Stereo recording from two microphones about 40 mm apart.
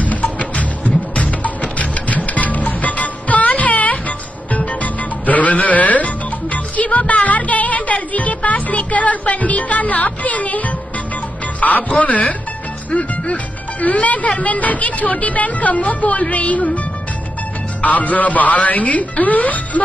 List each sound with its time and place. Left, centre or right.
0.0 s music: left
11.6 s speech: left
17.8 s speech: left